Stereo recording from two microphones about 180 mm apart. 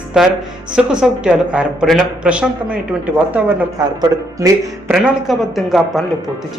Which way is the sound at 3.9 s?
20° right (ahead or behind).